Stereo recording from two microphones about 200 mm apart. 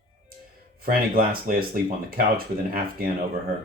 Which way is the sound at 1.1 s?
50° right (ahead or behind).